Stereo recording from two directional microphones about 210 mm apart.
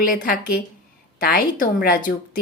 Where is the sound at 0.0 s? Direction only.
45° left (ahead or behind).